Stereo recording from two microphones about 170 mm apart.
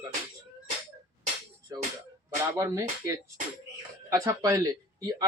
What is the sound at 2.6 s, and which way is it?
Speech, 15° right (ahead or behind).